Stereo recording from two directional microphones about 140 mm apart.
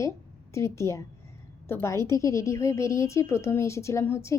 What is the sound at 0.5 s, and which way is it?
A woman's voice, 20° left (ahead or behind).